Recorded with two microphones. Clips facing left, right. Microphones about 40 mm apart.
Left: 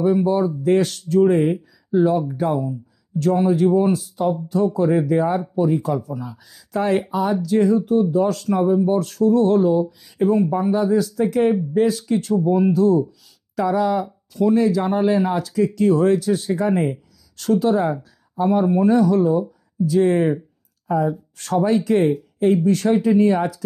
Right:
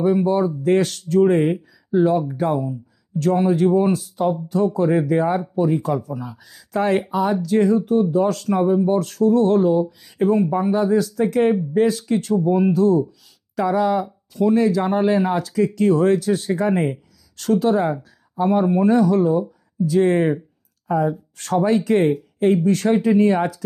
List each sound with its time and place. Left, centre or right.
0.0 s speech: right
14.5 s speech: right